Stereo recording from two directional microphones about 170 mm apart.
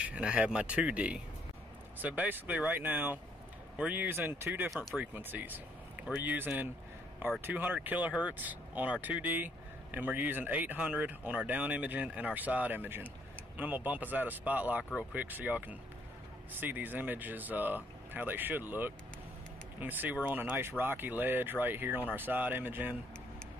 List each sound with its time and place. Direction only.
0.0 s speech: 5° right (ahead or behind)